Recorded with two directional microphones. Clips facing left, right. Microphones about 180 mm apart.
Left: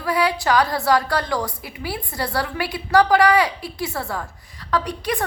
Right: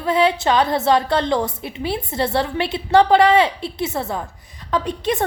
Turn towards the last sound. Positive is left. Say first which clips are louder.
# right 2 dB
turn(degrees=-25)  # may be behind; listen again after turning